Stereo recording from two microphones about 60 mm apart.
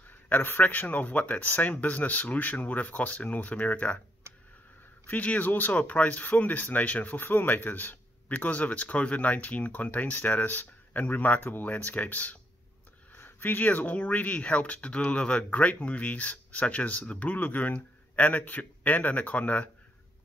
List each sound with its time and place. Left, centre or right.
0.3 s speech: left
5.0 s speech: left